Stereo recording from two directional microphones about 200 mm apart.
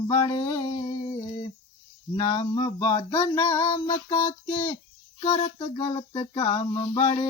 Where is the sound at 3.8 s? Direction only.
25° left (ahead or behind).